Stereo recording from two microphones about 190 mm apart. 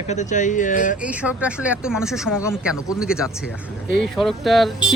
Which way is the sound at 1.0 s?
5° right (ahead or behind).